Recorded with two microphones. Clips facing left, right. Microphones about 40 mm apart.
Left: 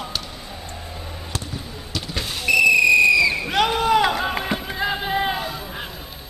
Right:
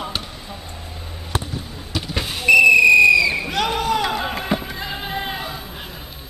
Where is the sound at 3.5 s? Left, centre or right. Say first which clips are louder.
Left 2 dB; centre.